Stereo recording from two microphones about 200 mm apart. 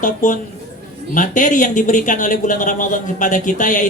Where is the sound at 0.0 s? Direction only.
40° left (ahead or behind).